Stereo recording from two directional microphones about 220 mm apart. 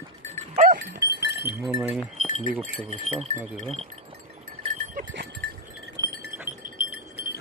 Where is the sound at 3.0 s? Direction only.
30° right (ahead or behind).